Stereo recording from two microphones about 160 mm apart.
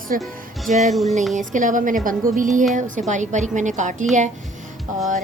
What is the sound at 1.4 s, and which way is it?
A woman's voice, 55° right (ahead or behind).